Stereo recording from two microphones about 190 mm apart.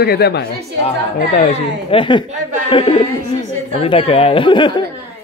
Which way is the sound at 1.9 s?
25° left (ahead or behind).